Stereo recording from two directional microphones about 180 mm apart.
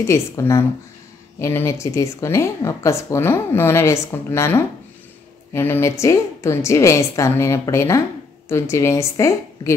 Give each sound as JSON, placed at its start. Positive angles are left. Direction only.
{"t": 0.0, "sound": "speech", "side_deg": 15}